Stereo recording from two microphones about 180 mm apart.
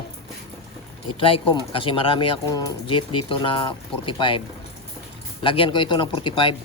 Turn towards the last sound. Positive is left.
turn(degrees=30)  # may be behind; listen again after turning